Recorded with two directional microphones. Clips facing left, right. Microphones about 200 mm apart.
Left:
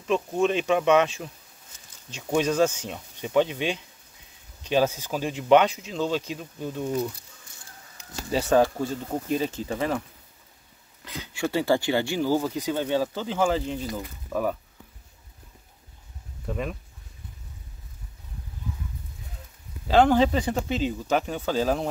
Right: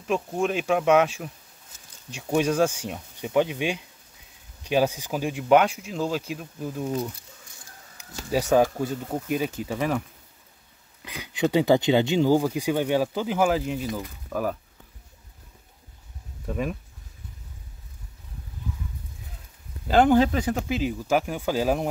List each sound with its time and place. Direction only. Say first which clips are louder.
0.0 s speech: left 2 dB; 10° right (ahead or behind)
5.9 s insect: left 1 dB; 5° right (ahead or behind)
8.0 s speech: right 1 dB; 10° right (ahead or behind)
11.1 s speech: right 4 dB; 15° right (ahead or behind)
16.4 s speech: right 2 dB; 5° right (ahead or behind)
20.1 s speech: right 1 dB; 5° right (ahead or behind)